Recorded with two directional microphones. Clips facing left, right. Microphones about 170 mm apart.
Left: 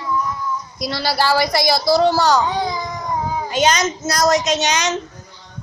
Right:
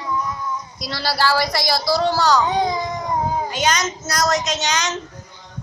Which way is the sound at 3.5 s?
20° left (ahead or behind).